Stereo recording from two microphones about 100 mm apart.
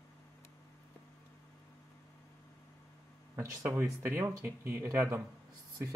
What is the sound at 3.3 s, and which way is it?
Speech, 20° right (ahead or behind).